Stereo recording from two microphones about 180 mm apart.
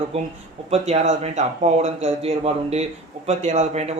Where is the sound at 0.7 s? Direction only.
35° right (ahead or behind).